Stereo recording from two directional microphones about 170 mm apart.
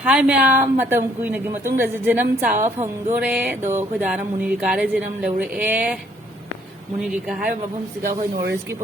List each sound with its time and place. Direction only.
0.0 s a sound: 10° right (ahead or behind)
7.0 s speech: 5° right (ahead or behind)
8.0 s speech: 65° right (ahead or behind)